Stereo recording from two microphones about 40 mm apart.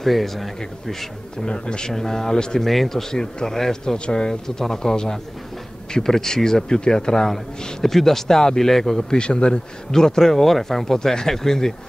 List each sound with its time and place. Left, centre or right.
0.0 s speech: centre
1.4 s speech: left
1.9 s a man's voice: centre
2.6 s a man's voice: centre
9.2 s a man's voice: left